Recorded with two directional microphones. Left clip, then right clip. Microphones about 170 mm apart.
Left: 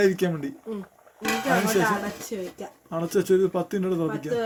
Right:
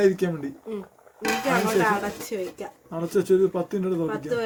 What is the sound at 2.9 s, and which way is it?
Speech, 15° left (ahead or behind).